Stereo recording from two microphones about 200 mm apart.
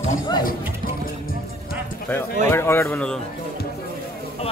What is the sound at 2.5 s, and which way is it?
Speech, 10° left (ahead or behind).